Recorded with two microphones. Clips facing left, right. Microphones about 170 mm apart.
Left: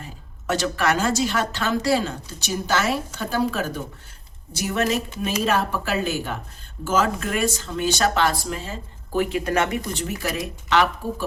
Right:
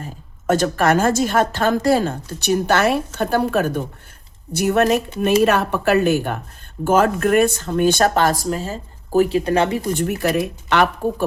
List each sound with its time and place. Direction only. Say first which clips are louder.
0.0 s a woman's voice: right 8 dB; 50° right (ahead or behind); by 9.9 s 30° right (ahead or behind)
9.9 s speech: right 8 dB; 55° right (ahead or behind)